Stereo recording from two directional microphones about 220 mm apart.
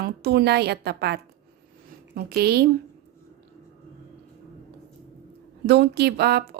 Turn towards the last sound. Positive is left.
turn(degrees=-45)  # may be behind; listen again after turning